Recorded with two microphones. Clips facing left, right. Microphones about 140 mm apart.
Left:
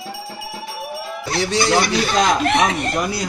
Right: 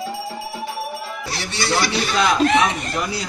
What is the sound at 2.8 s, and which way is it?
Speech, 55° left (ahead or behind).